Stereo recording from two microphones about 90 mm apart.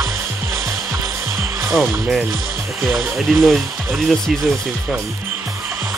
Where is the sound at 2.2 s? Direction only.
30° right (ahead or behind).